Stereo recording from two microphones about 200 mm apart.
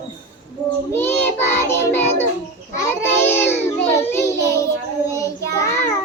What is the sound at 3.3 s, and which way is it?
Music, 10° left (ahead or behind).